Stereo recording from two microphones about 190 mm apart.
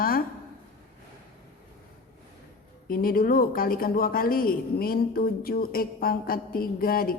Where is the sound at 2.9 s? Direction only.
50° left (ahead or behind).